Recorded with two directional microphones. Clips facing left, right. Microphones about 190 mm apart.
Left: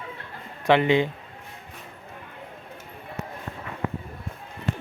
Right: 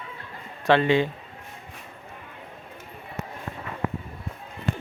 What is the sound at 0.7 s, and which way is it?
Speech, 15° left (ahead or behind).